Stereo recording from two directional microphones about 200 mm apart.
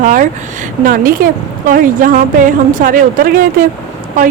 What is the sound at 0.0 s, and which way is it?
A woman's voice, 40° right (ahead or behind).